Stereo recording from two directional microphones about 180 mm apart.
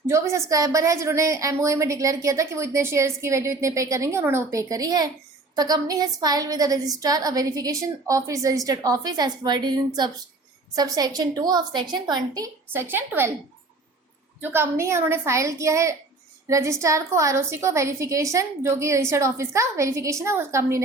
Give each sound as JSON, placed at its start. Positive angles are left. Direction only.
{"t": 0.1, "sound": "a woman's voice", "side_deg": -15}
{"t": 14.5, "sound": "a woman's voice", "side_deg": -15}